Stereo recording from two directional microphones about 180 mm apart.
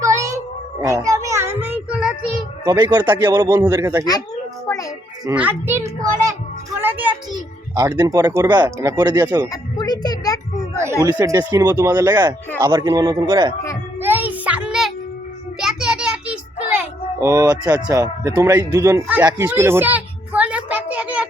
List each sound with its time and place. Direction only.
0.0 s child singing: 15° right (ahead or behind)
2.6 s a man's voice: 20° right (ahead or behind)
3.1 s speech: 10° right (ahead or behind)
3.3 s a man's voice: 20° right (ahead or behind)
4.6 s music: 20° left (ahead or behind)
5.3 s a woman's voice: 10° right (ahead or behind)
9.5 s a child's voice: 20° left (ahead or behind)
11.0 s a man's voice: 20° right (ahead or behind)
14.0 s music: 10° right (ahead or behind)
15.6 s child singing: 5° right (ahead or behind); by 17.7 s 20° right (ahead or behind)
17.8 s speech: 15° right (ahead or behind)
19.2 s a sound: 15° right (ahead or behind)